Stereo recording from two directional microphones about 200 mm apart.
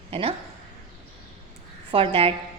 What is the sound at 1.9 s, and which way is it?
Speech, 25° right (ahead or behind).